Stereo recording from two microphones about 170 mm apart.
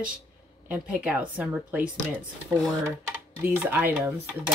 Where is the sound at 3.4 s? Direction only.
10° right (ahead or behind).